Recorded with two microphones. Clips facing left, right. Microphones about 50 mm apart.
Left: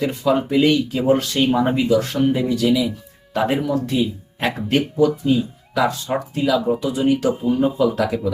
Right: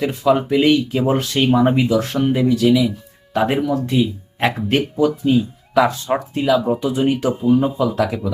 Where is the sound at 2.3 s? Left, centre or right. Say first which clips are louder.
Right 7 dB; centre.